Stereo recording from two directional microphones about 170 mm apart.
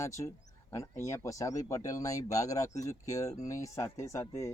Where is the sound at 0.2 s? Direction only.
25° left (ahead or behind).